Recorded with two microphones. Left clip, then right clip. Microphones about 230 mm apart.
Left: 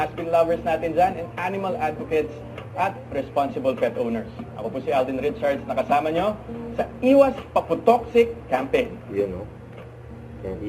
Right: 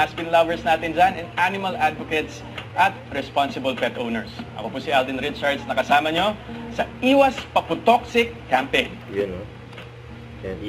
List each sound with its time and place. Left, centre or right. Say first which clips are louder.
0.0 s speech: right 2 dB; centre